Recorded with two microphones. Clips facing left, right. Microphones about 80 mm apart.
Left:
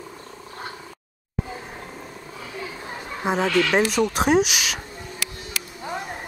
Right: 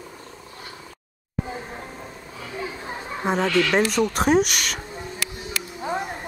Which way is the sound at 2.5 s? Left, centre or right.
Centre.